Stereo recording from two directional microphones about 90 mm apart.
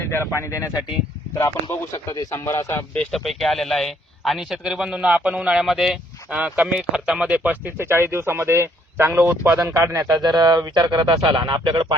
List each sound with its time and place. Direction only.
0.0 s a sound: 25° left (ahead or behind)
0.3 s speech: 35° left (ahead or behind)
3.1 s speech: centre (ahead or behind); by 10.2 s 35° right (ahead or behind)
10.2 s speech: 50° right (ahead or behind)